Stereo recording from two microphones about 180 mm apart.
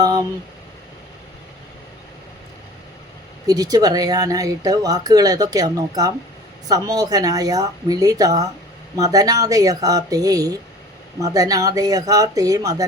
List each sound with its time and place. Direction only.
0.0 s speech: 20° right (ahead or behind)
3.4 s speech: 20° right (ahead or behind)